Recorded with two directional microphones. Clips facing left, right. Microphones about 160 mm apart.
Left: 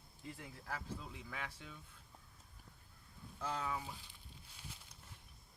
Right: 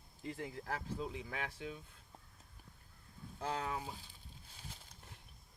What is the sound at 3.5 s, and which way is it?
Speech, 50° right (ahead or behind).